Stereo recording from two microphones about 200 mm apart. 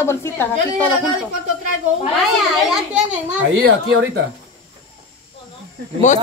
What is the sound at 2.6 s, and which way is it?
Speech, 5° right (ahead or behind).